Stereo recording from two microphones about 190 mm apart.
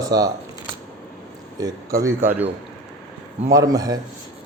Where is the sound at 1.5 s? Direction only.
20° right (ahead or behind).